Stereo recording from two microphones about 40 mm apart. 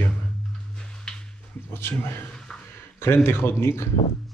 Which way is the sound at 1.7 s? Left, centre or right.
Left.